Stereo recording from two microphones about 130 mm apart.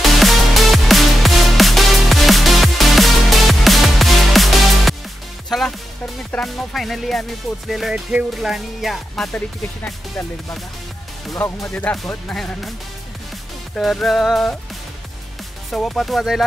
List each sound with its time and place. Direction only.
0.0 s music: centre (ahead or behind)
6.3 s speech: centre (ahead or behind)
11.3 s speech: 20° left (ahead or behind)
11.7 s speech: 10° left (ahead or behind)
13.7 s speech: centre (ahead or behind)
15.7 s speech: centre (ahead or behind)